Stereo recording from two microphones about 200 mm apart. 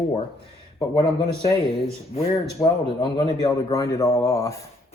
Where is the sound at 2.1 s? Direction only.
35° left (ahead or behind).